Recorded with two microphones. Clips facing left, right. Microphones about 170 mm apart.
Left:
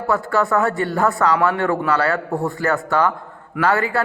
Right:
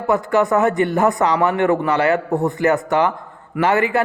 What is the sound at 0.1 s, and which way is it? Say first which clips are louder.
Speech: right 3 dB; 20° right (ahead or behind).